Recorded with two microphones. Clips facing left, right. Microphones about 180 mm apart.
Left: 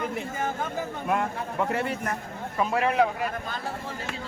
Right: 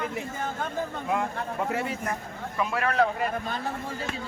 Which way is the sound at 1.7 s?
60° left (ahead or behind).